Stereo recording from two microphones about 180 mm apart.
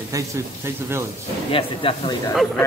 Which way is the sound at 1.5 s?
30° left (ahead or behind).